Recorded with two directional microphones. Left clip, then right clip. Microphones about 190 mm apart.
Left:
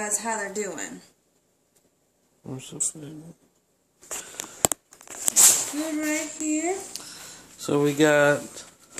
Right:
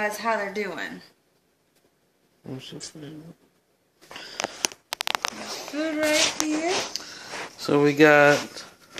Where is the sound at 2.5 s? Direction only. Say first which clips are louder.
Left 4 dB; 20° left (ahead or behind).